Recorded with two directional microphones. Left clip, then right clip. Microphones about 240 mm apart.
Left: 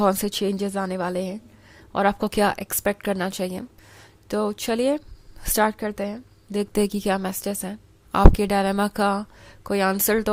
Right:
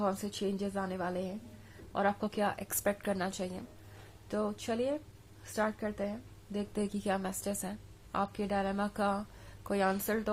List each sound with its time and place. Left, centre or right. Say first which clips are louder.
0.0 s a woman's voice: left 12 dB; left
4.3 s a woman's voice: left 10 dB; left